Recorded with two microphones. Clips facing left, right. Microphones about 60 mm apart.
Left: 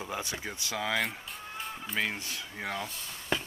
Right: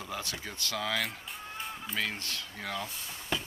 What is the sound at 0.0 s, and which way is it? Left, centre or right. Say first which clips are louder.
Speech: left 2 dB; centre.